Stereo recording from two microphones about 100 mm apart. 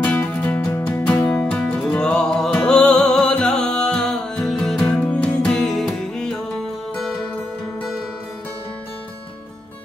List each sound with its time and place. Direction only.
0.0 s music: 10° left (ahead or behind)